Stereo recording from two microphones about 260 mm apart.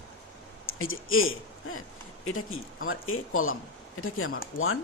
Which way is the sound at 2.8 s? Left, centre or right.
Left.